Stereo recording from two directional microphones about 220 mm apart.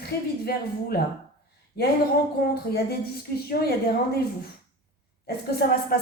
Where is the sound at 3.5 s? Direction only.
45° left (ahead or behind).